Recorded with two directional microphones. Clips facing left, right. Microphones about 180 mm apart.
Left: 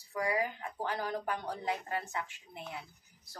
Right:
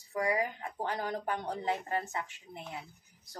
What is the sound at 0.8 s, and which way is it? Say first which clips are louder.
Speech: right 1 dB; 25° right (ahead or behind).